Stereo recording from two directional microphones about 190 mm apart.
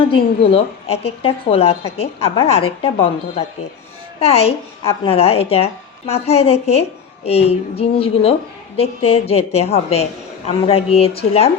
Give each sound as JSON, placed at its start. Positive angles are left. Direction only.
{"t": 0.0, "sound": "a woman's voice", "side_deg": 30}